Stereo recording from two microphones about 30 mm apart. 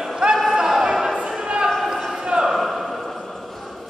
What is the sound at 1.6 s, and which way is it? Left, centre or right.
Basketball bounce, centre.